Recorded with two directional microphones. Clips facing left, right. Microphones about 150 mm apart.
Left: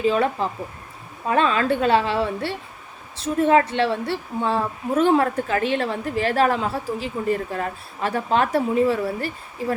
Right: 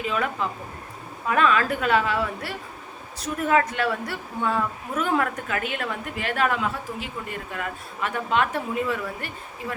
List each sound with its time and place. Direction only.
0.0 s a woman's voice: 30° left (ahead or behind)